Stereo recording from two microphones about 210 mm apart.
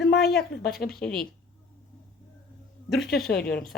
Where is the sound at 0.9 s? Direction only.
5° left (ahead or behind).